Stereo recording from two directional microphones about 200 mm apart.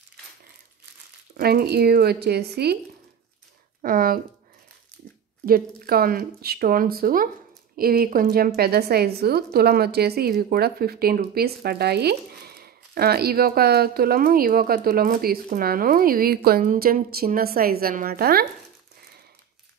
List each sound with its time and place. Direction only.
1.3 s a woman's voice: 50° right (ahead or behind)
3.8 s a woman's voice: 45° right (ahead or behind)
5.4 s a woman's voice: 45° right (ahead or behind)